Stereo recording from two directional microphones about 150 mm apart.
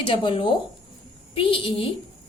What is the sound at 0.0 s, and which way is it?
A woman's voice, 30° left (ahead or behind).